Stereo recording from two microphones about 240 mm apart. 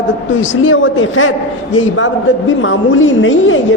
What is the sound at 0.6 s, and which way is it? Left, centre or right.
Speech, left.